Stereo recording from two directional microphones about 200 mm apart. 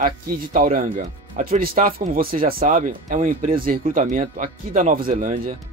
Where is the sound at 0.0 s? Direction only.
45° right (ahead or behind).